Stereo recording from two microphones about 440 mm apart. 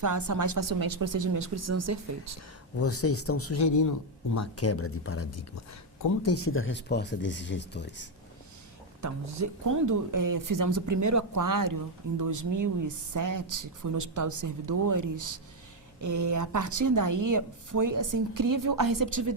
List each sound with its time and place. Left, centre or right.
0.0 s speech: right
2.7 s speech: left
9.0 s a woman's voice: right